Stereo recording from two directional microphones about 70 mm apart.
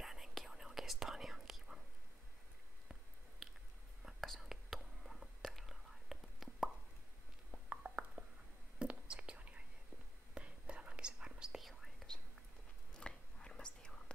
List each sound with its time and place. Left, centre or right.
0.0 s whispering: centre
3.4 s biting: centre
4.0 s whispering: centre
7.5 s a sound: centre
8.7 s whispering: centre
12.9 s biting: centre